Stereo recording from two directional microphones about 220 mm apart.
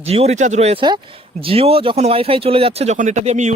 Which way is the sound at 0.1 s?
30° right (ahead or behind).